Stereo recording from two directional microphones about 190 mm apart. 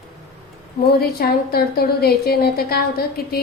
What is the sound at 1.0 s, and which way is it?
A woman's voice, 55° left (ahead or behind).